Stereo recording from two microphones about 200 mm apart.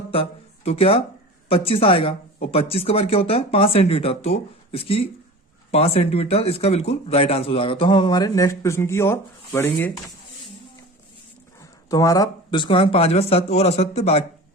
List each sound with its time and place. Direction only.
0.1 s speech: 30° left (ahead or behind); by 9.9 s 10° left (ahead or behind)
11.6 s speech: 15° left (ahead or behind)